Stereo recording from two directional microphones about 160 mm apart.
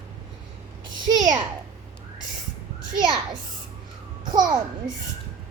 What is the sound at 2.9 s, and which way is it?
Speech, 30° right (ahead or behind).